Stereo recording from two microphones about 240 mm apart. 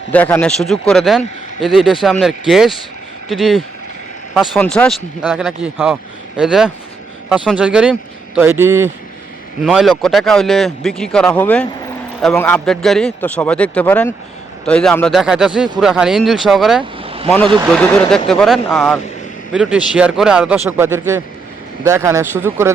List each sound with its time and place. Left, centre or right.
0.1 s speech: centre
17.0 s vehicle: right
17.2 s speech: centre